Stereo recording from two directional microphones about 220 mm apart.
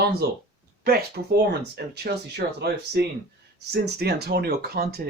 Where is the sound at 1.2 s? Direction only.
45° right (ahead or behind).